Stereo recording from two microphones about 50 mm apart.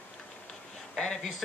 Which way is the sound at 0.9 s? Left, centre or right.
Centre.